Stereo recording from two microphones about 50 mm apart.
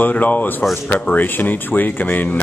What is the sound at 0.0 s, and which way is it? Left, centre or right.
Speech, left.